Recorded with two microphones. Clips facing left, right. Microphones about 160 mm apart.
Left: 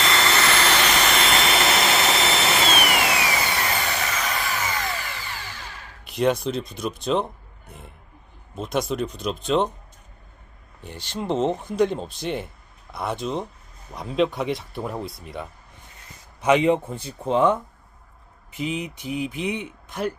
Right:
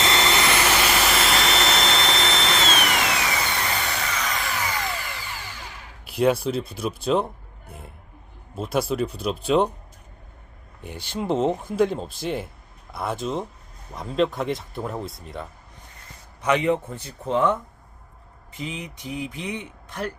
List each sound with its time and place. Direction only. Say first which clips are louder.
0.0 s jet engine: even; 20° right (ahead or behind); by 4.9 s centre (ahead or behind)
4.9 s a sound: left 1 dB; 10° right (ahead or behind)
8.5 s speech: right 1 dB; 5° right (ahead or behind)
10.8 s speech: right 1 dB; 10° right (ahead or behind)
16.4 s speech: left 3 dB; 20° left (ahead or behind)